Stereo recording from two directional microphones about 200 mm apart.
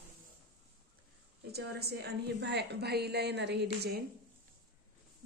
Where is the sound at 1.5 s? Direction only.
55° right (ahead or behind).